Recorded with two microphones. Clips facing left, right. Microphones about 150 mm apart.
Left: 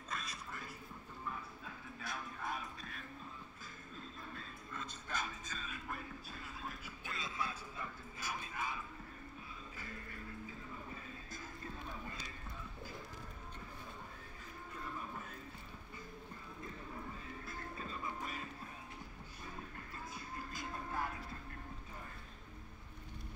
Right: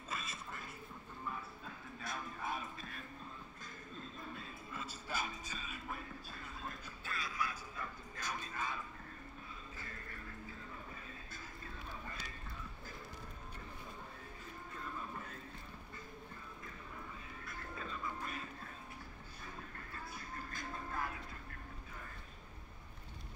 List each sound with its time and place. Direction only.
0.1 s a sound: centre (ahead or behind)
2.0 s music: centre (ahead or behind)
4.4 s music: 10° right (ahead or behind)
7.1 s music: 25° left (ahead or behind)
7.8 s bow-wow: 10° left (ahead or behind)
20.5 s music: 20° left (ahead or behind)